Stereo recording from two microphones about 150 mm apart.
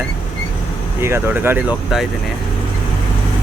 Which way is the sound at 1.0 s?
15° right (ahead or behind).